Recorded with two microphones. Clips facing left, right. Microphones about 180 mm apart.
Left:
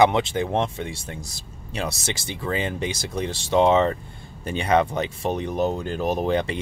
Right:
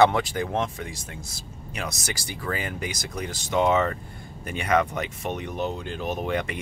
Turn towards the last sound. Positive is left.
turn(degrees=30)  # may be behind; listen again after turning